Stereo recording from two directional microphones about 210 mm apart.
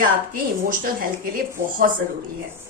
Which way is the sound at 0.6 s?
40° right (ahead or behind).